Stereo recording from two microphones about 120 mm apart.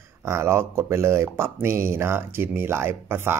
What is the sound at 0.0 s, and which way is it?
Speech, 25° right (ahead or behind).